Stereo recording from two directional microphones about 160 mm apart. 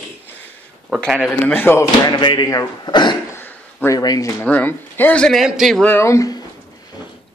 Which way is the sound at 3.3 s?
15° left (ahead or behind).